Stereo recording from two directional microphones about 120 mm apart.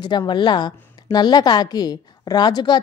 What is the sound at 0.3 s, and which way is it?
A woman's voice, 40° left (ahead or behind).